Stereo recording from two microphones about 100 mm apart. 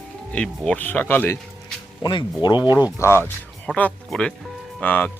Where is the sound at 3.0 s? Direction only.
25° left (ahead or behind).